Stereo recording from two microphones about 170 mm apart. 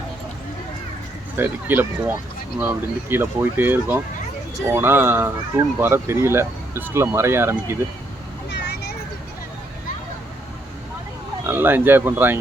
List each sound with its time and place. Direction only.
1.4 s speech: 10° right (ahead or behind)
8.4 s vehicle: 80° left
11.4 s speech: 10° right (ahead or behind)